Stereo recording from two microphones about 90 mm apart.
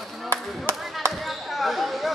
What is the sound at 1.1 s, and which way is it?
Basketball bounce, centre (ahead or behind).